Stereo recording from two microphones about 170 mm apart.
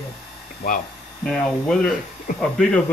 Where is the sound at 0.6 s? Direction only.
55° left (ahead or behind).